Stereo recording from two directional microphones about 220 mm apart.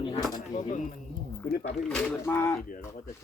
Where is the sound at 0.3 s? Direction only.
35° left (ahead or behind).